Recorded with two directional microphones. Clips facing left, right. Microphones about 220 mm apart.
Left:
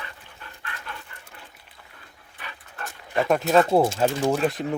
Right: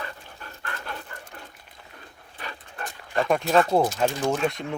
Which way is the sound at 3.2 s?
Centre (ahead or behind).